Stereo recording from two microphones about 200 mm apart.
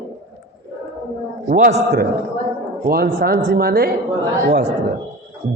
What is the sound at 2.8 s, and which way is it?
A man's voice, 50° right (ahead or behind).